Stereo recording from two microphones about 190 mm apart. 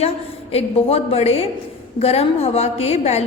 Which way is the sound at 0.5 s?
30° left (ahead or behind).